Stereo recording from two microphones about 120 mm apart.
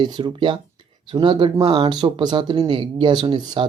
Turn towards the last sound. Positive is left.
turn(degrees=-40)  # may be behind; listen again after turning